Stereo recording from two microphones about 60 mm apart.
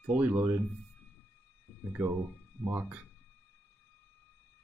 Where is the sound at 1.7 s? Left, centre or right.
Left.